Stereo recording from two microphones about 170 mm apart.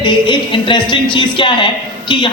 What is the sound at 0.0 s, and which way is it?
A man's voice, 30° left (ahead or behind).